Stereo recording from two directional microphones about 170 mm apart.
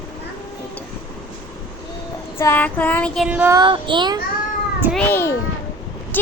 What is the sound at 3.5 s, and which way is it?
Child singing, 25° right (ahead or behind).